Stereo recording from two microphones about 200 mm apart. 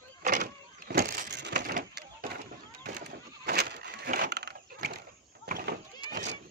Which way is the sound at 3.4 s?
55° right (ahead or behind).